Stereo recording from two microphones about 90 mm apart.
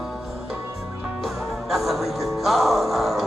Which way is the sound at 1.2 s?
5° right (ahead or behind).